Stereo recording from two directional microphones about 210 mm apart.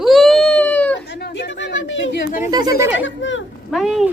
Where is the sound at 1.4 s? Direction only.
55° left (ahead or behind).